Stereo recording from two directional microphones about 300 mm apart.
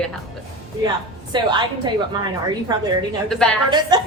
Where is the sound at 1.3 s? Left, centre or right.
Centre.